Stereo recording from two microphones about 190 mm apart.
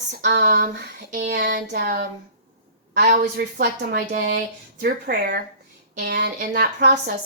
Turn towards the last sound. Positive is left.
turn(degrees=-60)  # may be behind; listen again after turning